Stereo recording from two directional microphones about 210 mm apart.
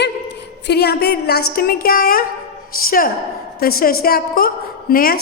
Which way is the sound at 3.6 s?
45° left (ahead or behind).